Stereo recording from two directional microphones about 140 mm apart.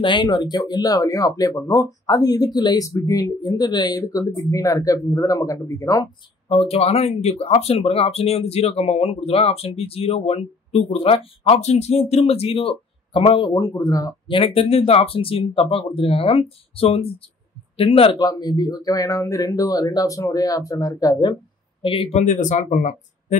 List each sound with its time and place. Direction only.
0.0 s speech: 35° left (ahead or behind)
6.5 s speech: 45° left (ahead or behind)
13.6 s speech: 25° left (ahead or behind); by 18.1 s 40° left (ahead or behind)
18.2 s speech: 30° left (ahead or behind)
22.2 s speech: 60° left (ahead or behind)